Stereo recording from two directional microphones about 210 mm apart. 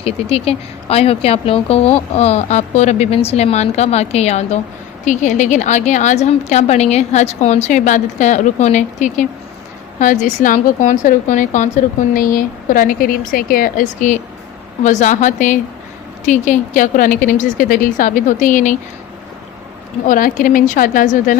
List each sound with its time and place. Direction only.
0.0 s a woman's voice: 30° left (ahead or behind)
20.1 s a woman's voice: 40° left (ahead or behind)